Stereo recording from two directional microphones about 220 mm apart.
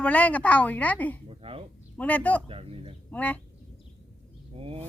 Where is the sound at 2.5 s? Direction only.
25° right (ahead or behind).